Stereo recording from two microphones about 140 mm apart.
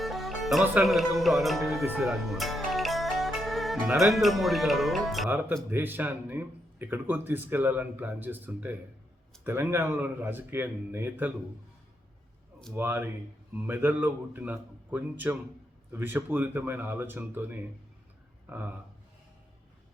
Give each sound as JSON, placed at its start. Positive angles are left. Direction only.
{"t": 0.0, "sound": "music", "side_deg": 0}
{"t": 0.8, "sound": "speech", "side_deg": 0}
{"t": 2.0, "sound": "music", "side_deg": 0}
{"t": 3.9, "sound": "speech", "side_deg": 0}
{"t": 5.7, "sound": "speech", "side_deg": -15}
{"t": 12.7, "sound": "speech", "side_deg": -15}